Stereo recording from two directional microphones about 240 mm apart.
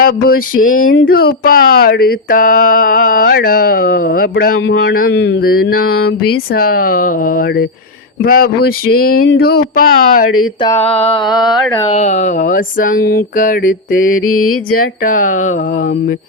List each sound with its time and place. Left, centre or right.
0.0 s a sound: left
10.2 s speech: left
10.6 s mantra: centre
11.0 s mantra: left
11.3 s carnatic music: centre
11.9 s a sound: left